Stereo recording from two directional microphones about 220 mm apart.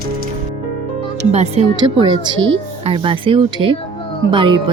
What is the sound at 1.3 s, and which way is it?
Speech, 30° right (ahead or behind).